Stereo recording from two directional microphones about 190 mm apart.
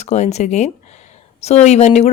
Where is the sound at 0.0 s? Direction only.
35° left (ahead or behind).